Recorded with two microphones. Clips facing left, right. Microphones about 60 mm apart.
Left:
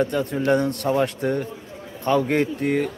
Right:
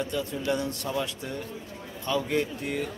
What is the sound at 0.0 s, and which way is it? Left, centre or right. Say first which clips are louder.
Speech: left 8 dB; left.